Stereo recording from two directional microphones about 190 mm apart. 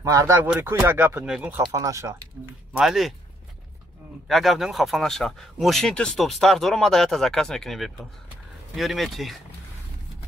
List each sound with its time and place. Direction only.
0.0 s speech: 15° right (ahead or behind)
2.7 s speech: centre (ahead or behind)
4.3 s speech: centre (ahead or behind)